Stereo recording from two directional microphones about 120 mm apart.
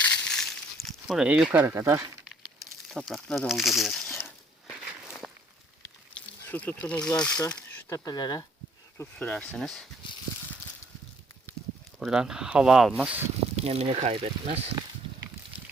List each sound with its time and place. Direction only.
0.1 s a sound: 5° left (ahead or behind)
1.6 s speech: 20° right (ahead or behind)
2.3 s a sound: 5° left (ahead or behind)
4.8 s walk: 5° right (ahead or behind)
6.4 s speech: 15° left (ahead or behind)
7.5 s a sound: 15° left (ahead or behind)
7.9 s speech: 30° left (ahead or behind)
9.0 s speech: 10° left (ahead or behind)
11.9 s speech: 5° right (ahead or behind)
13.6 s speech: 60° right (ahead or behind)